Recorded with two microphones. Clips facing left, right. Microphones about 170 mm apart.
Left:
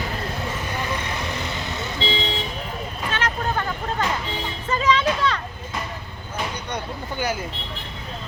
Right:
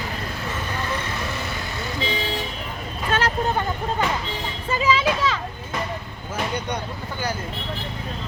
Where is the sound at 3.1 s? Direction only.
50° right (ahead or behind).